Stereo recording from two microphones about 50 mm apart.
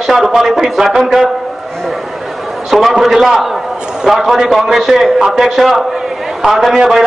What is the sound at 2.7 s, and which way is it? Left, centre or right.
A man's voice, centre.